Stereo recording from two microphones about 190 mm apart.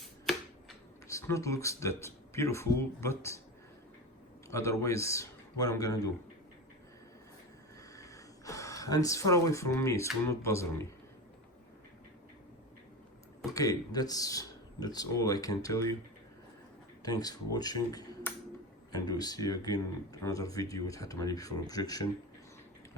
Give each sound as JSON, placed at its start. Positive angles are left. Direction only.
{"t": 1.0, "sound": "speech", "side_deg": 15}
{"t": 4.4, "sound": "speech", "side_deg": 15}
{"t": 7.9, "sound": "speech", "side_deg": 15}
{"t": 13.5, "sound": "speech", "side_deg": 20}
{"t": 17.0, "sound": "speech", "side_deg": 20}